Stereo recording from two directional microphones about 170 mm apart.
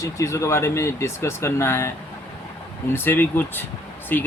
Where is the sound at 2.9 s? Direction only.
10° left (ahead or behind).